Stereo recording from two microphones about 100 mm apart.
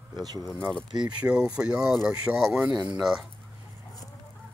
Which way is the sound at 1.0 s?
10° right (ahead or behind).